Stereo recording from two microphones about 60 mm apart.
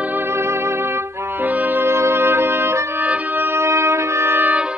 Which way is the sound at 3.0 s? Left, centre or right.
Right.